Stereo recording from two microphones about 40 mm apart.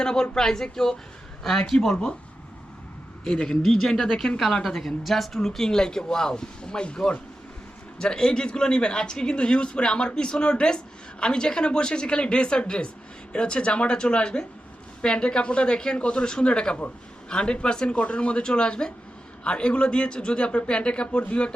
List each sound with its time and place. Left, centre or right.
0.0 s speech: centre
1.9 s speech: left
3.2 s speech: centre